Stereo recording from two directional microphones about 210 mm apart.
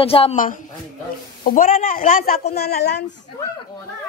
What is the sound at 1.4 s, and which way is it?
Speech, 40° left (ahead or behind).